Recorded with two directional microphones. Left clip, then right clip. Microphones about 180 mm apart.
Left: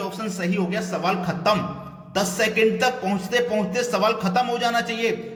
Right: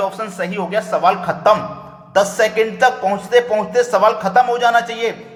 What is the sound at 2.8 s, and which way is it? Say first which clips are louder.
A man's voice: right 8 dB; 15° left (ahead or behind).